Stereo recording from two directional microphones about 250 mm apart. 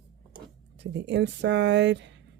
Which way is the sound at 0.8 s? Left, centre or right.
Right.